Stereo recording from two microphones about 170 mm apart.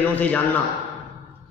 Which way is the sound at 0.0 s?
10° left (ahead or behind).